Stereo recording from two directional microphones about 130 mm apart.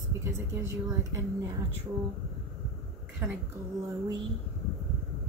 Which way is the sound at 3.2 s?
20° right (ahead or behind).